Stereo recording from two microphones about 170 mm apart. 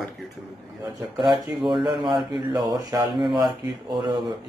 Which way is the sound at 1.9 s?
25° right (ahead or behind).